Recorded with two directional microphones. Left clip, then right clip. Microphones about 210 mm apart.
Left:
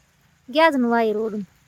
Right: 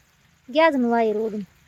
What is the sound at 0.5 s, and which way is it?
Speech, centre (ahead or behind).